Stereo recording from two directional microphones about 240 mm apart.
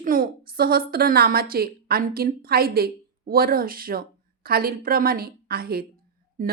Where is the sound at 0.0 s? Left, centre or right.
Right.